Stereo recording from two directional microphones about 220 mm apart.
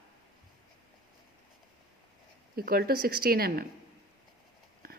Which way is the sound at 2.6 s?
45° right (ahead or behind).